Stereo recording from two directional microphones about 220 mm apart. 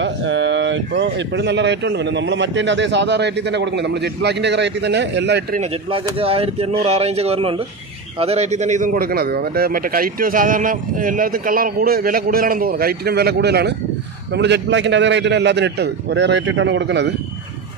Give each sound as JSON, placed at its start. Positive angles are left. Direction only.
{"t": 0.0, "sound": "speech", "side_deg": -55}
{"t": 5.6, "sound": "a man's voice", "side_deg": -25}